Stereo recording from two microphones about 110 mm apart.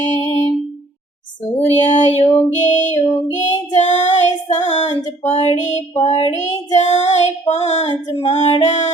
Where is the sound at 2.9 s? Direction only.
90° left.